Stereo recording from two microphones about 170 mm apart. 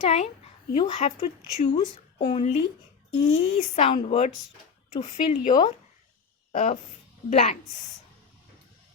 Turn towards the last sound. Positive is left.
turn(degrees=40)  # may be behind; listen again after turning